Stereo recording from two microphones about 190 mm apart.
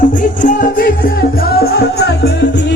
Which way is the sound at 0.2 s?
45° left (ahead or behind).